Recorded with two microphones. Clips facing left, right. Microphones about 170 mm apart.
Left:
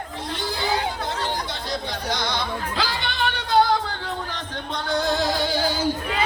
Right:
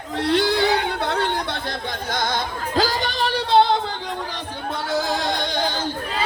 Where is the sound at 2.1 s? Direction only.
50° right (ahead or behind); by 3.8 s 25° right (ahead or behind).